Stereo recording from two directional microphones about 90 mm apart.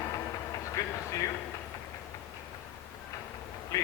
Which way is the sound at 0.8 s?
35° left (ahead or behind).